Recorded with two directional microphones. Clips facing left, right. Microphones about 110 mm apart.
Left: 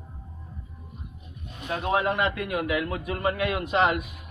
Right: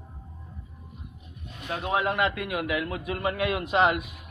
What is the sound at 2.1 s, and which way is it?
A man's voice, 5° right (ahead or behind).